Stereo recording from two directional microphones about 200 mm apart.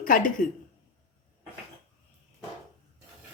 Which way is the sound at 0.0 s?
45° left (ahead or behind).